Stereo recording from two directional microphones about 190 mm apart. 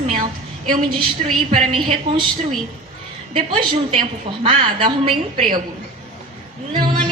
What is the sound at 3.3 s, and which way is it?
A woman's voice, 25° right (ahead or behind).